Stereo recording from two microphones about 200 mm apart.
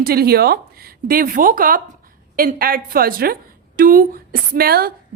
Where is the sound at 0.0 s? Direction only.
50° right (ahead or behind).